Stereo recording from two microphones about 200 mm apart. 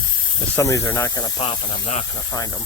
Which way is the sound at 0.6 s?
15° left (ahead or behind).